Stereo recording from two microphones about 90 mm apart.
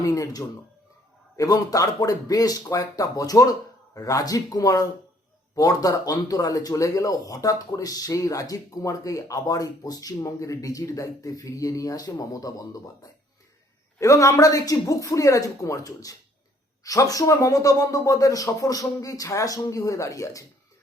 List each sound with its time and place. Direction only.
0.0 s speech: 40° left (ahead or behind)